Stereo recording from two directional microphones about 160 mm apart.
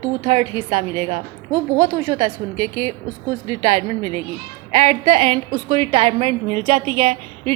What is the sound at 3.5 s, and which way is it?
A woman's voice, 45° right (ahead or behind).